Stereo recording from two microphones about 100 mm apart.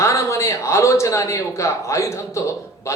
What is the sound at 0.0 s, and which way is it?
A man's voice, 30° left (ahead or behind).